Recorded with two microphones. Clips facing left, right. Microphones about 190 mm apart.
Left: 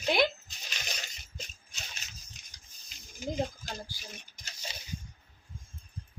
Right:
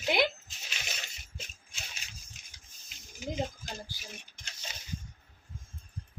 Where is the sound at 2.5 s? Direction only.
Centre (ahead or behind).